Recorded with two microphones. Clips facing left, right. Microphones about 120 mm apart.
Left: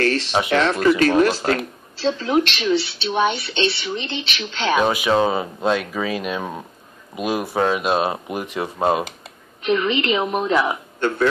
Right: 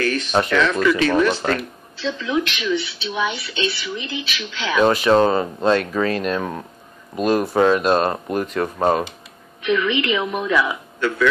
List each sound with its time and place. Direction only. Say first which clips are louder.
0.0 s speech: even; 30° left (ahead or behind)
4.7 s speech: right 4 dB; 10° left (ahead or behind)
9.7 s speech: even; 35° left (ahead or behind)